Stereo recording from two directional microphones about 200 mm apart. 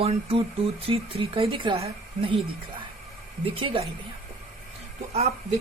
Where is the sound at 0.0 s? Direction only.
30° right (ahead or behind).